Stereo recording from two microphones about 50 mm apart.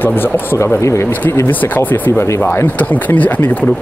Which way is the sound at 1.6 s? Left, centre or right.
Left.